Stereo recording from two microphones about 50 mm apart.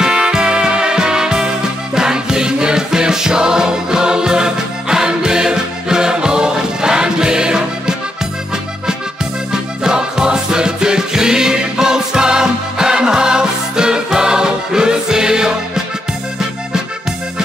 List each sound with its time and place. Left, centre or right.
0.0 s music: centre
9.5 s music: centre